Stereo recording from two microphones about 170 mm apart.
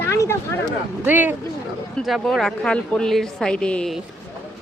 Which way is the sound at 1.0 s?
10° right (ahead or behind).